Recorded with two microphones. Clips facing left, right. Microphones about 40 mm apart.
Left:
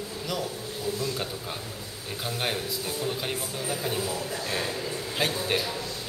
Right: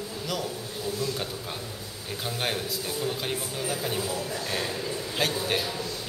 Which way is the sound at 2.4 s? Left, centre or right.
Centre.